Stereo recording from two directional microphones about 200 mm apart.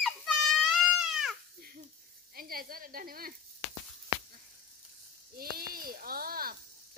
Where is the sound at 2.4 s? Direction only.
45° right (ahead or behind).